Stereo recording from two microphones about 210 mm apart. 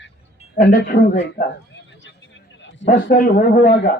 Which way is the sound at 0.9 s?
65° left (ahead or behind).